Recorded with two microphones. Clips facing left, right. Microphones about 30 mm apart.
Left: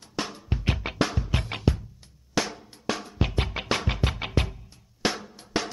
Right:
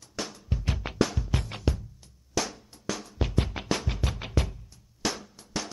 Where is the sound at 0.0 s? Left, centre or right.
Left.